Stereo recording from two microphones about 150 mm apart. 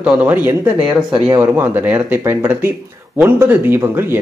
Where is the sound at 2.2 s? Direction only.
20° right (ahead or behind).